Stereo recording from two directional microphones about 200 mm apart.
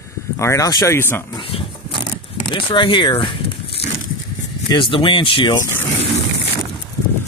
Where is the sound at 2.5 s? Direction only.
25° left (ahead or behind).